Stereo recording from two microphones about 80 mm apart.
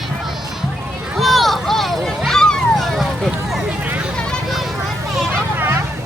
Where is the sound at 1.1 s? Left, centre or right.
Centre.